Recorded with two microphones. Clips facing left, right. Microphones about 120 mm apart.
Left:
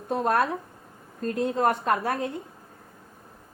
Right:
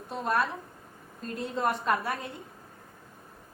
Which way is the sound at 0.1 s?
50° left (ahead or behind).